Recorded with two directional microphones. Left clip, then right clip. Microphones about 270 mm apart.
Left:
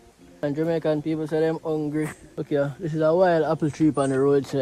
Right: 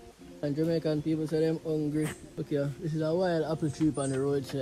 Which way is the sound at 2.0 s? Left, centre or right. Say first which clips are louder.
Left 5 dB; centre.